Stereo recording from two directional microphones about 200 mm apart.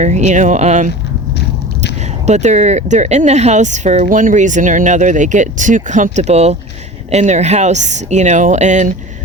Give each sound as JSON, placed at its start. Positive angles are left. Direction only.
{"t": 0.0, "sound": "speech", "side_deg": -35}
{"t": 2.2, "sound": "speech", "side_deg": -35}